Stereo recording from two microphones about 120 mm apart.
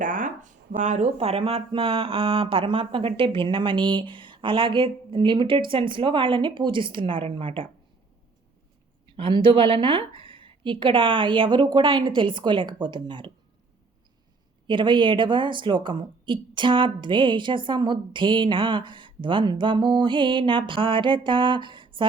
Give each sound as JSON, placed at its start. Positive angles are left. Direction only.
{"t": 0.0, "sound": "speech", "side_deg": -90}
{"t": 9.0, "sound": "speech", "side_deg": -45}
{"t": 14.7, "sound": "speech", "side_deg": -45}